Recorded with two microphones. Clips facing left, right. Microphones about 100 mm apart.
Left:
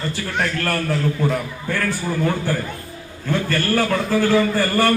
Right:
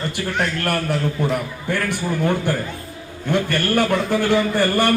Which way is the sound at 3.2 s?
20° right (ahead or behind).